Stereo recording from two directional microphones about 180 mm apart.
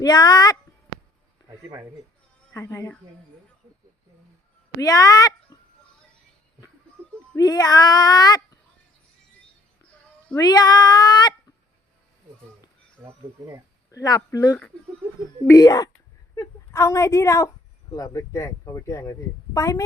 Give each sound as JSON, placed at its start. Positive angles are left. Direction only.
{"t": 0.0, "sound": "speech", "side_deg": 20}
{"t": 2.5, "sound": "speech", "side_deg": 15}
{"t": 4.8, "sound": "speech", "side_deg": 20}
{"t": 7.3, "sound": "speech", "side_deg": 20}
{"t": 10.3, "sound": "speech", "side_deg": 20}
{"t": 13.9, "sound": "a woman's voice", "side_deg": 20}